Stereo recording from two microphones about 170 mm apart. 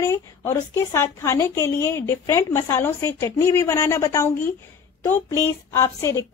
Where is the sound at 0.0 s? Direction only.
15° left (ahead or behind).